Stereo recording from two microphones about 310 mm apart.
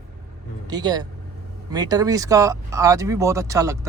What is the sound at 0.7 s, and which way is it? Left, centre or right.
A man's voice, centre.